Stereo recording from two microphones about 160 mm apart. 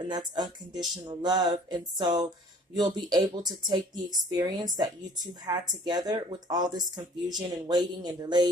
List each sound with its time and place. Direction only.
0.1 s speech: 25° right (ahead or behind)